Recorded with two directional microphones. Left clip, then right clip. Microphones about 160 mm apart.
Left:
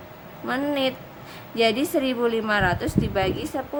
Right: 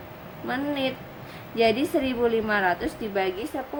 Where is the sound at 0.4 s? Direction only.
30° left (ahead or behind).